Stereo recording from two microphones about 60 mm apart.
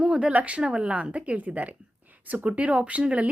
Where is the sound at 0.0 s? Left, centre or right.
Centre.